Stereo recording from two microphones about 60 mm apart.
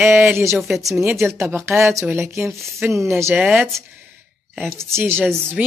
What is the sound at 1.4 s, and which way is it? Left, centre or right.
Speech, right.